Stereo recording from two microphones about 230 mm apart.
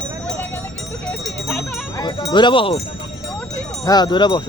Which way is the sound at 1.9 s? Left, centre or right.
Centre.